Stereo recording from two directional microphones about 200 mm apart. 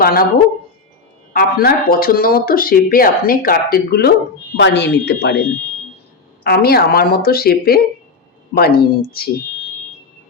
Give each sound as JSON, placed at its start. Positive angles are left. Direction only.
{"t": 0.0, "sound": "speech", "side_deg": 50}
{"t": 1.3, "sound": "speech", "side_deg": 45}
{"t": 4.5, "sound": "speech", "side_deg": 60}
{"t": 6.4, "sound": "speech", "side_deg": 50}